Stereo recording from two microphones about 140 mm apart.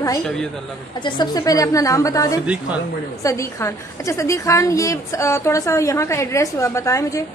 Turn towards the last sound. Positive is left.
turn(degrees=20)  # may be behind; listen again after turning